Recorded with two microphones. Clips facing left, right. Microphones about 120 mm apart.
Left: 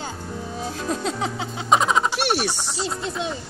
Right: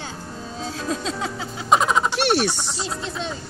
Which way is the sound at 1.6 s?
Centre (ahead or behind).